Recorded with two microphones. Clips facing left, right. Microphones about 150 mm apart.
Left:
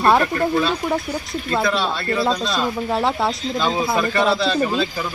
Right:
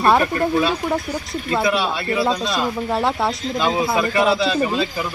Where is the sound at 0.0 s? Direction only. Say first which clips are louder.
Even; centre (ahead or behind).